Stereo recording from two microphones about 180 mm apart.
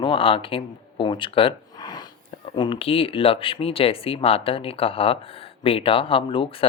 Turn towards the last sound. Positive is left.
turn(degrees=30)  # may be behind; listen again after turning